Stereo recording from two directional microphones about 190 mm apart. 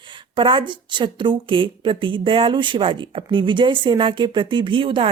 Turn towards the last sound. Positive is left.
turn(degrees=-25)  # may be behind; listen again after turning